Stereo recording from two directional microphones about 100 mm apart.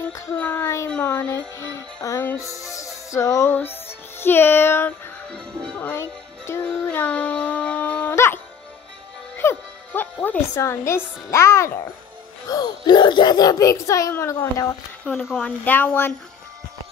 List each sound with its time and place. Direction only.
0.4 s speech: 20° left (ahead or behind)
5.3 s speech: 10° left (ahead or behind); by 6.6 s 25° left (ahead or behind)
6.8 s a sound: 20° left (ahead or behind)
8.1 s music: 25° left (ahead or behind)
9.4 s music: 20° left (ahead or behind)
10.5 s speech: 30° left (ahead or behind)
12.4 s speech: 40° left (ahead or behind)
15.1 s speech: 15° left (ahead or behind)